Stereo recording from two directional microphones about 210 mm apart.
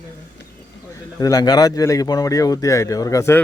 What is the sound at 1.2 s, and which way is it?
Speech, 15° left (ahead or behind).